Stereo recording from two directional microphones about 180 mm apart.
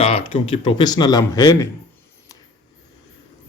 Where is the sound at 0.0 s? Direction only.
30° left (ahead or behind).